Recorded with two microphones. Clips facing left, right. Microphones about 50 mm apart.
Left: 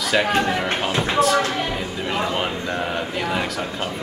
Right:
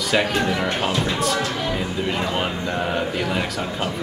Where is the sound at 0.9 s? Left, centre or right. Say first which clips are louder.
Even; left.